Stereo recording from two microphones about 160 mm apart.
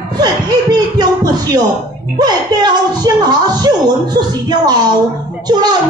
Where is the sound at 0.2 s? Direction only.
25° right (ahead or behind).